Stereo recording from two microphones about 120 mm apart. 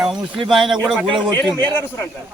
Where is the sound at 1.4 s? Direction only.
15° left (ahead or behind).